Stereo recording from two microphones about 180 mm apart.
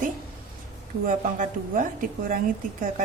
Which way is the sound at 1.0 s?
50° right (ahead or behind).